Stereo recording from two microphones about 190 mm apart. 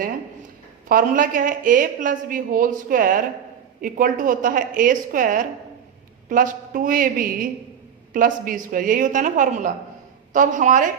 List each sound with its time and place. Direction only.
0.9 s a woman's voice: 45° right (ahead or behind)